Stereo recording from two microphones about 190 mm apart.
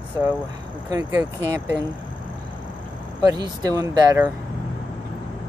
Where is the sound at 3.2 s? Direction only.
20° right (ahead or behind).